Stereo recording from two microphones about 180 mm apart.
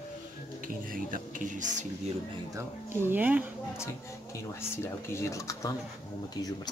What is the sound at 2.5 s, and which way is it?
Speech, 15° right (ahead or behind).